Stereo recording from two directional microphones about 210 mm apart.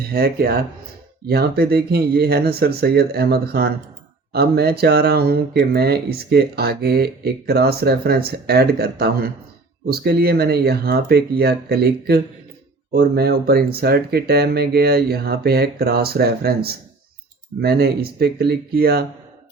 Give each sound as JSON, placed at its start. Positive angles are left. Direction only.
{"t": 0.0, "sound": "speech", "side_deg": -45}